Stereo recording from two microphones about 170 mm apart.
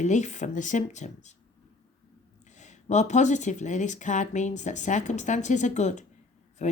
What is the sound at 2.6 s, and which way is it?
Speech, 45° left (ahead or behind).